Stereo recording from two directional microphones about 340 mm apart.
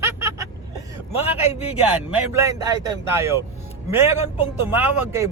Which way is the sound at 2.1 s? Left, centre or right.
Centre.